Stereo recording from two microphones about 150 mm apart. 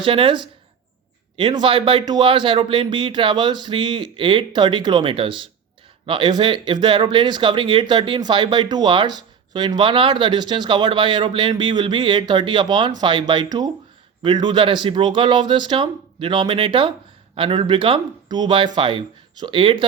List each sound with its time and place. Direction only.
0.0 s speech: 35° right (ahead or behind)